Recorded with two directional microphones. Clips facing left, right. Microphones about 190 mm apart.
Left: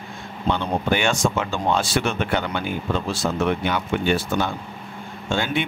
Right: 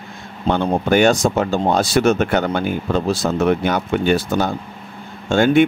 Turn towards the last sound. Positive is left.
turn(degrees=-45)  # may be behind; listen again after turning